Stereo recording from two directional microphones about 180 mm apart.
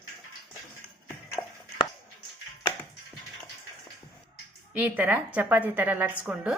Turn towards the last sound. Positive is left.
turn(degrees=-5)  # may be behind; listen again after turning